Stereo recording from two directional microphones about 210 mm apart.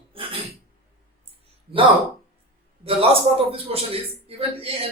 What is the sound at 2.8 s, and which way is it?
A man's voice, 30° right (ahead or behind).